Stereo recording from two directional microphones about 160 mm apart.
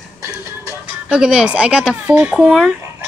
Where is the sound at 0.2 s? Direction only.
20° right (ahead or behind).